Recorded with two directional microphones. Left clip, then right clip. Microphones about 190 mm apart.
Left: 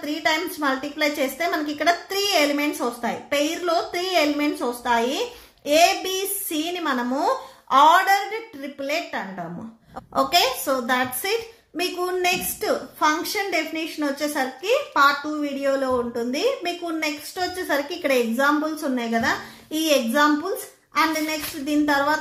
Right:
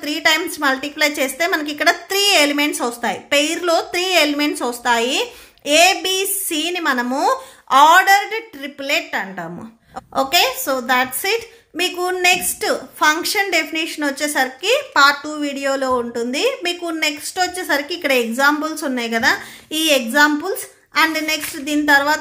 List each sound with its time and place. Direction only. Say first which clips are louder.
0.0 s a woman's voice: right 6 dB; 30° right (ahead or behind)
10.1 s a woman's voice: right 3 dB; 20° right (ahead or behind)